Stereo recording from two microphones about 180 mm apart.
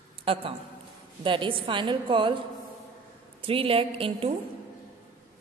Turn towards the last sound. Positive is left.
turn(degrees=-30)  # may be behind; listen again after turning